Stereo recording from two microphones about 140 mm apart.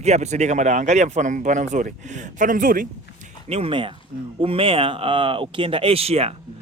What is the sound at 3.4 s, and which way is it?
Speech, 45° right (ahead or behind).